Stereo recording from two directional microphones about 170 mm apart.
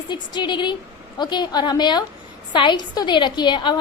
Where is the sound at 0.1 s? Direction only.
25° left (ahead or behind).